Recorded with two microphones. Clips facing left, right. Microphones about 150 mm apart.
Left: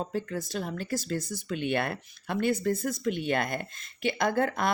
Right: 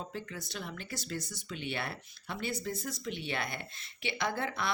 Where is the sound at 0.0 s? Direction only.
45° left (ahead or behind).